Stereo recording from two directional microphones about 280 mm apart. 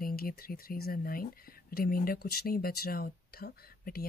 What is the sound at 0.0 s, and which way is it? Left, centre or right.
Speech, left.